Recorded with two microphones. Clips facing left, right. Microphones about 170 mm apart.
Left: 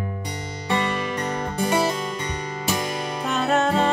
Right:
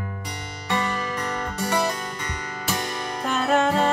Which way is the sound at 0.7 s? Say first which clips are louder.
Left 2 dB; 20° left (ahead or behind).